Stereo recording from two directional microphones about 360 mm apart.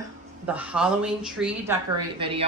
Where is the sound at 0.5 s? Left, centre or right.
Centre.